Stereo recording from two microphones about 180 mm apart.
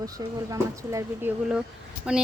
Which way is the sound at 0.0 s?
20° right (ahead or behind).